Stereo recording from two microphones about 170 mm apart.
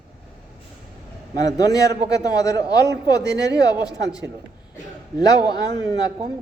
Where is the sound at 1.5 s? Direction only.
20° left (ahead or behind).